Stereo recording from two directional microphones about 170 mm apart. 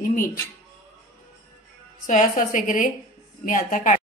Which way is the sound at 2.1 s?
50° left (ahead or behind).